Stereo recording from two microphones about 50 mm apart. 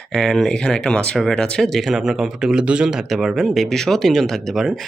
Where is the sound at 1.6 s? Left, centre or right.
Centre.